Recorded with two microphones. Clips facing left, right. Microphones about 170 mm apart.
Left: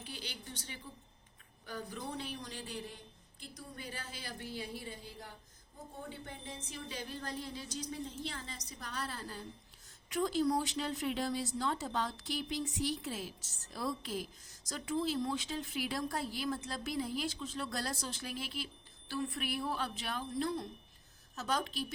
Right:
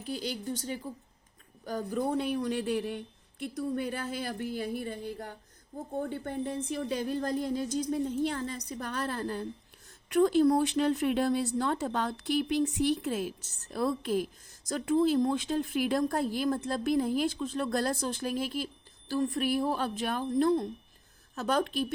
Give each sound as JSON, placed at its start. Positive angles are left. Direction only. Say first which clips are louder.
{"t": 0.0, "sound": "speech", "louder": "right 12 dB", "side_deg": -45}